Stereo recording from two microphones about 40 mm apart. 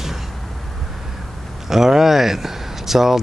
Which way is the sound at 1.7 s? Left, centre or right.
Centre.